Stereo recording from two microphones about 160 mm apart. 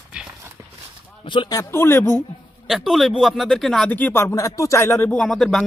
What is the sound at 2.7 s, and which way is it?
Speech, centre (ahead or behind).